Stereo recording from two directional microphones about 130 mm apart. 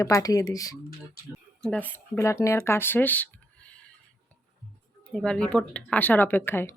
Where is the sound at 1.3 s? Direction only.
5° left (ahead or behind).